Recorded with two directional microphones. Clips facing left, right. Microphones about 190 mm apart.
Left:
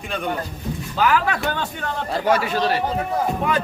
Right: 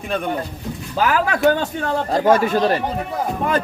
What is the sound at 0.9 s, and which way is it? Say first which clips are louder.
Speech: right 1 dB; 45° right (ahead or behind).